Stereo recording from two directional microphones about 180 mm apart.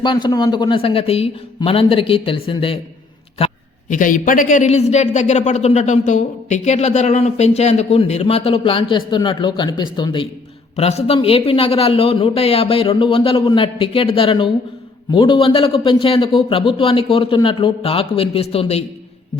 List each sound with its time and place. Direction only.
0.0 s a man's voice: 25° left (ahead or behind)